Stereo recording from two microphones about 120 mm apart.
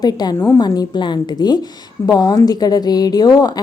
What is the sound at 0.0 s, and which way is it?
Speech, 35° left (ahead or behind).